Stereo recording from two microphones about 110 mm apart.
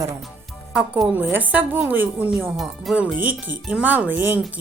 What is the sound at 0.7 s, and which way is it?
Speech, 5° right (ahead or behind).